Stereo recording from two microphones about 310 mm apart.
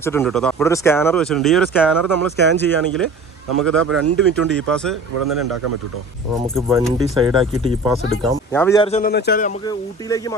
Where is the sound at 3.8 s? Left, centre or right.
Right.